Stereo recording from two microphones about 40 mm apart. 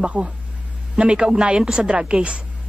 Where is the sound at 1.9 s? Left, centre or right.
Right.